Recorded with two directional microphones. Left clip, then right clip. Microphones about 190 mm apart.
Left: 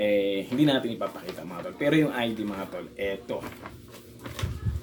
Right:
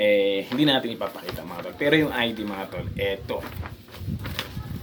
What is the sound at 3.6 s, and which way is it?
Walk, 20° right (ahead or behind).